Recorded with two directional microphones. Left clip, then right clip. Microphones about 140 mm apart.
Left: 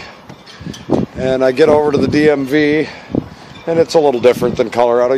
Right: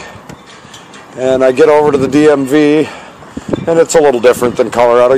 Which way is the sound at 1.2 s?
Centre (ahead or behind).